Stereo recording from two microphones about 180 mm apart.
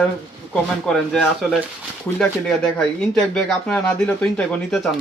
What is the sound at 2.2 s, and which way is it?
Speech, 5° left (ahead or behind).